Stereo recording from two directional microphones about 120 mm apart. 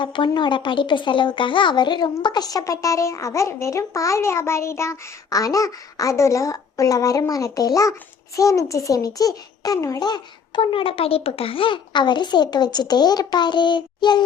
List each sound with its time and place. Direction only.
0.0 s a child's voice: 40° left (ahead or behind)